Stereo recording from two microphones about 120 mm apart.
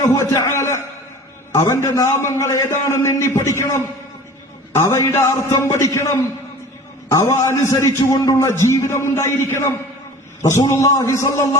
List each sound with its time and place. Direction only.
0.3 s a man's voice: 25° left (ahead or behind)